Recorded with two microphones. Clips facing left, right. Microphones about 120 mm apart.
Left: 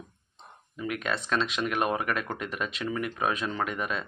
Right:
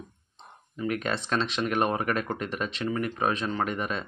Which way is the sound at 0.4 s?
35° right (ahead or behind).